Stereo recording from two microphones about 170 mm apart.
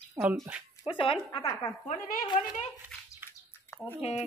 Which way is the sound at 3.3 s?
15° left (ahead or behind).